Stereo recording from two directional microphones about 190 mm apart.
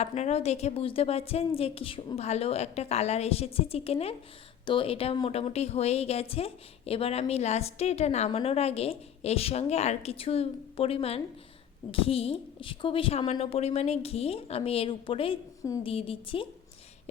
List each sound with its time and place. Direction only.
0.0 s a woman's voice: 35° left (ahead or behind)